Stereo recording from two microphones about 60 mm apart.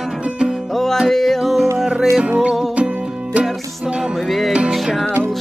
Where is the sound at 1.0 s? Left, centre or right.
Centre.